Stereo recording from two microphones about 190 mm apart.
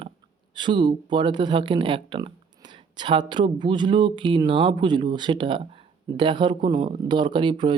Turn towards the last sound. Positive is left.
turn(degrees=-25)  # may be behind; listen again after turning